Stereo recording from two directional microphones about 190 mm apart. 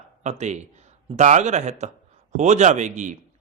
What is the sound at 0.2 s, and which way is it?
A man's voice, 35° right (ahead or behind).